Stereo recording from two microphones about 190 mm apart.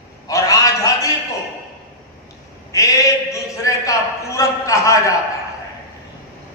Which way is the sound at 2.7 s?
15° left (ahead or behind).